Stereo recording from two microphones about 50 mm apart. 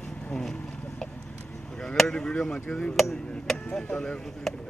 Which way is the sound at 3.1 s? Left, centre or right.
Centre.